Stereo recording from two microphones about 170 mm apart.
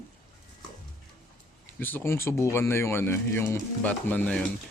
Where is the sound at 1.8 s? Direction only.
10° left (ahead or behind).